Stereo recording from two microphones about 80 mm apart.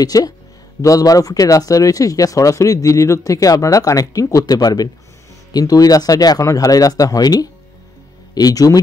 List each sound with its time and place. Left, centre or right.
0.0 s speech: left